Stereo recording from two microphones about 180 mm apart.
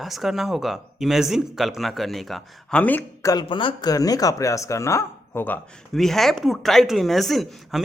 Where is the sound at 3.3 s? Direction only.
25° left (ahead or behind).